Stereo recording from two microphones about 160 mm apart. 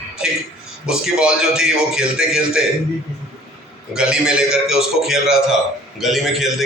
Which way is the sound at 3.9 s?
5° right (ahead or behind).